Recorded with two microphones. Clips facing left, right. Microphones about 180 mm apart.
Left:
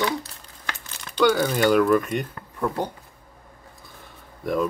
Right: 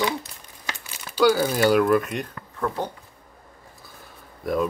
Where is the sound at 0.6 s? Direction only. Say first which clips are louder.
Even; 15° right (ahead or behind).